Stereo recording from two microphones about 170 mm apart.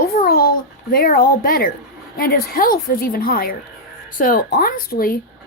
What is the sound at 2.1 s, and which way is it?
Speech, 60° left (ahead or behind).